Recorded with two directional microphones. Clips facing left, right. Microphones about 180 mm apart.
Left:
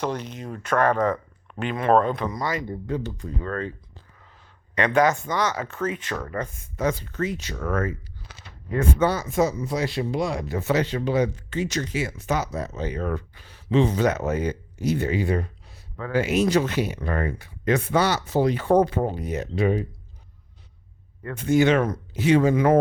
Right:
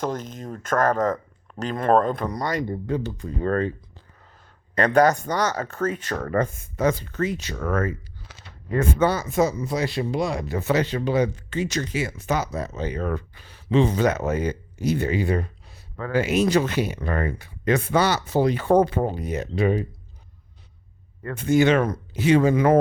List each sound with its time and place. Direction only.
0.0 s speech: 45° right (ahead or behind)
3.4 s speech: 50° right (ahead or behind)
4.2 s speech: 35° right (ahead or behind)
21.2 s speech: 45° right (ahead or behind)